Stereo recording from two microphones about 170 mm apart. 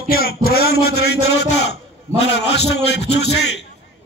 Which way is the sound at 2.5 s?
80° left.